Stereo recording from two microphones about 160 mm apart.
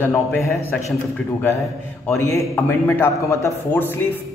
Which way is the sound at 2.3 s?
15° left (ahead or behind).